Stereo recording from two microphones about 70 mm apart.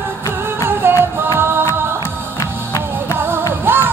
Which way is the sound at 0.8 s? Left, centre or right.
Right.